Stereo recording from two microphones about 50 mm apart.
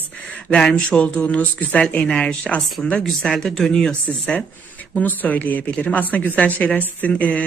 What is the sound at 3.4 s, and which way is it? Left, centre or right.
Speech, centre.